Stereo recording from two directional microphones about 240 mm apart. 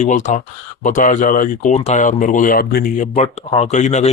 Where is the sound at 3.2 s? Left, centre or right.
Left.